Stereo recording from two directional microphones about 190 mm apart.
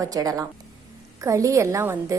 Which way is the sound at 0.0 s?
20° right (ahead or behind).